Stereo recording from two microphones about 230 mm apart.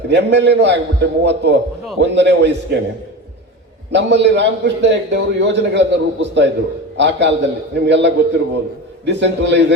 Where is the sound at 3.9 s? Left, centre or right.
Right.